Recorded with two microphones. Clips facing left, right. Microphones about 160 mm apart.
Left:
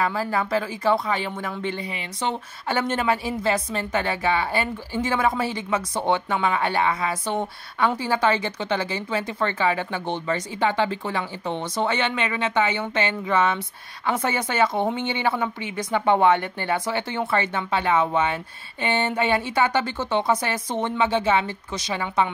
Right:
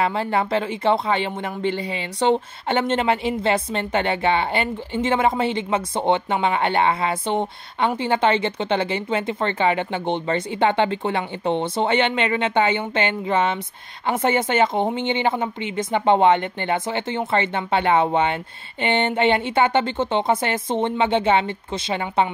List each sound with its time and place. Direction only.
0.0 s a woman's voice: 25° right (ahead or behind)
2.9 s a woman's voice: 25° right (ahead or behind)
14.2 s a woman's voice: 25° right (ahead or behind)